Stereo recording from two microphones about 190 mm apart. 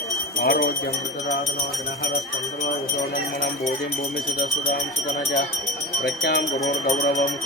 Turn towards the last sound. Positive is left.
turn(degrees=40)  # may be behind; listen again after turning